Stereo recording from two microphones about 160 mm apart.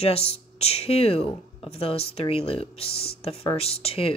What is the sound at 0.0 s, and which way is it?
Speech, 40° left (ahead or behind).